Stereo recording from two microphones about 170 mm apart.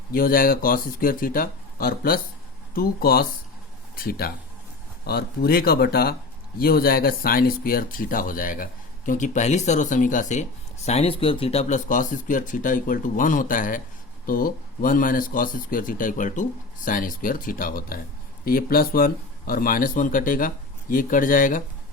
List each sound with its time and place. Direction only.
0.1 s speech: 55° left (ahead or behind)
10.8 s speech: 35° left (ahead or behind); by 21.6 s 55° left (ahead or behind)